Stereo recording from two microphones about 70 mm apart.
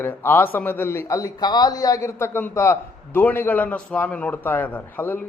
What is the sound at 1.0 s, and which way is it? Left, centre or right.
A man's voice, left.